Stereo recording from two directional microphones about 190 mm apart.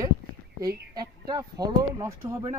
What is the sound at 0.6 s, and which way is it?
Speech, 20° right (ahead or behind).